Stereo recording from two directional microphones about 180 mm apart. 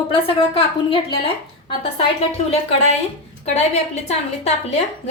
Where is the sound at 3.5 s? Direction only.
35° left (ahead or behind).